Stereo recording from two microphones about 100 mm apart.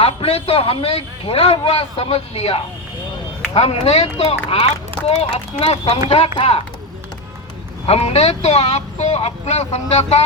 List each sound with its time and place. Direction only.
0.0 s a man's voice: 80° left
7.9 s speech: 90° left